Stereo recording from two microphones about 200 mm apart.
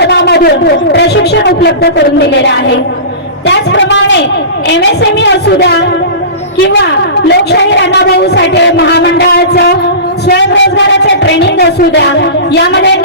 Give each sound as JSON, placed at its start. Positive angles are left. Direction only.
{"t": 0.0, "sound": "a sound", "side_deg": 55}
{"t": 0.9, "sound": "a woman's voice", "side_deg": 55}
{"t": 6.8, "sound": "a woman's voice", "side_deg": 55}